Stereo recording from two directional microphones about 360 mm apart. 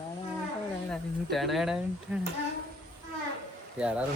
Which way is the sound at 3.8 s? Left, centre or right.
Centre.